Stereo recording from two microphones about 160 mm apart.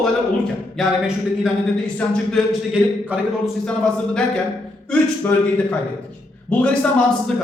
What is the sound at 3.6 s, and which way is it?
Speech, 5° left (ahead or behind).